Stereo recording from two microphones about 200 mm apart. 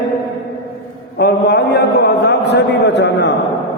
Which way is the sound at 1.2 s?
55° left (ahead or behind).